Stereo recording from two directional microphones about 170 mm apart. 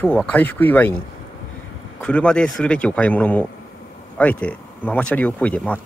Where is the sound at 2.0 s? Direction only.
5° left (ahead or behind).